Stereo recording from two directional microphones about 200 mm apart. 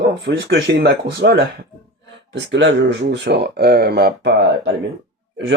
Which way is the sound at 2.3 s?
65° right (ahead or behind).